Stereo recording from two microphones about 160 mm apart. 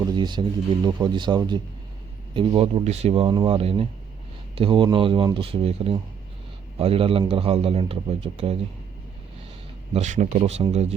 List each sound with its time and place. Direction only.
0.0 s a man's voice: 25° right (ahead or behind)
9.9 s speech: 45° right (ahead or behind)